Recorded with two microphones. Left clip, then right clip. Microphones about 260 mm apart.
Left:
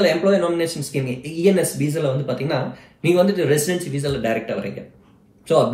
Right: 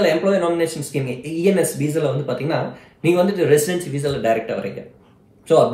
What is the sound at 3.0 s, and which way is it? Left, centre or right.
A man's voice, centre.